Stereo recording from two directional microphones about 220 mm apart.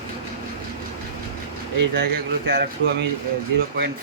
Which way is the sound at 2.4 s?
50° right (ahead or behind).